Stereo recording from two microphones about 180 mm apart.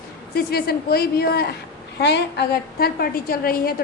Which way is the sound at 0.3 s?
60° left (ahead or behind).